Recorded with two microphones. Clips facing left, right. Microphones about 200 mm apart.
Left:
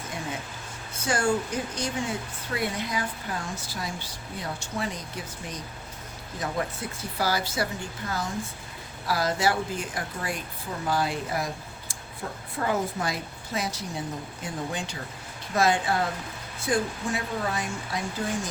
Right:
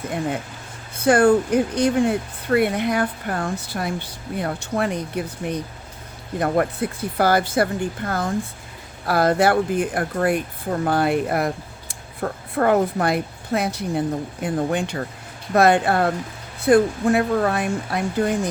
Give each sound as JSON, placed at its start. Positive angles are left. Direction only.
{"t": 0.9, "sound": "speech", "side_deg": -60}